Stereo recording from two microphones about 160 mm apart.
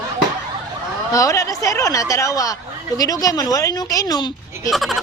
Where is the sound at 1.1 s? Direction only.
20° left (ahead or behind).